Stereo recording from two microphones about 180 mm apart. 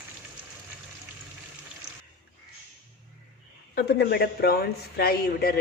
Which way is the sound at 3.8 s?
60° left (ahead or behind).